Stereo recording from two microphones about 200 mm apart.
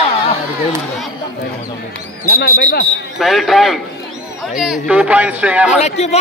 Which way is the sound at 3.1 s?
Centre (ahead or behind).